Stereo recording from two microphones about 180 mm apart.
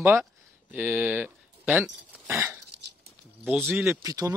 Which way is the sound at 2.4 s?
15° right (ahead or behind).